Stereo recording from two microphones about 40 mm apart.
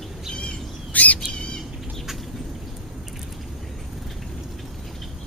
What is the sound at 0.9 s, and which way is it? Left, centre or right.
Bird, left.